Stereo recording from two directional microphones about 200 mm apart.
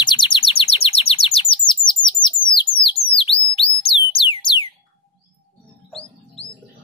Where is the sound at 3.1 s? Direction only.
30° left (ahead or behind).